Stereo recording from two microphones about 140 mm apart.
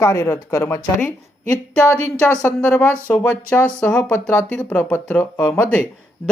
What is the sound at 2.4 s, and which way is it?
Speech, 10° left (ahead or behind).